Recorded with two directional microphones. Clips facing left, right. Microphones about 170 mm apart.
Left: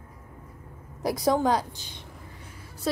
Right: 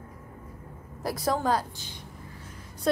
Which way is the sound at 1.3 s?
15° left (ahead or behind).